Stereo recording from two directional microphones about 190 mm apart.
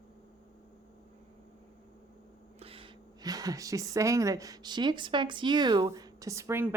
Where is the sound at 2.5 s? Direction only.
30° right (ahead or behind).